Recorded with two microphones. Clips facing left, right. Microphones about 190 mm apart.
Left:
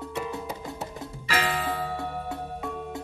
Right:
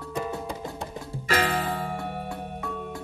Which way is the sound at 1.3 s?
45° right (ahead or behind).